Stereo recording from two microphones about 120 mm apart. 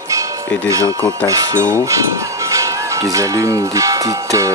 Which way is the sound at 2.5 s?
25° right (ahead or behind).